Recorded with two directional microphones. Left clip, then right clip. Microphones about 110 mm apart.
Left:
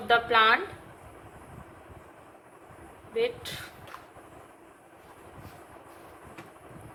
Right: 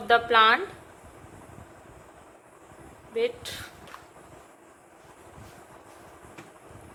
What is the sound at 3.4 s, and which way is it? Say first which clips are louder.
Speech: right 1 dB; 60° right (ahead or behind).